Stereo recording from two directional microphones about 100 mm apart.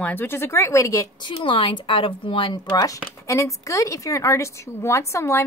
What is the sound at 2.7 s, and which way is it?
Speech, 35° left (ahead or behind).